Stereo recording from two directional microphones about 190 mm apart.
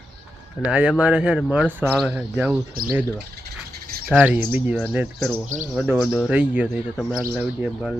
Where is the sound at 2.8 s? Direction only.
50° right (ahead or behind).